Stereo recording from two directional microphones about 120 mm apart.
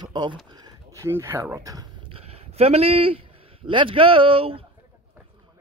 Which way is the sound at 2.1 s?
55° right (ahead or behind).